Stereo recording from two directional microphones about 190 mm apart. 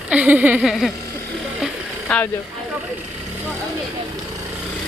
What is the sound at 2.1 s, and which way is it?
Speech, 5° left (ahead or behind).